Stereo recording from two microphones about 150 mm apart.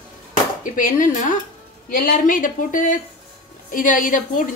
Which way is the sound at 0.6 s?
60° left (ahead or behind).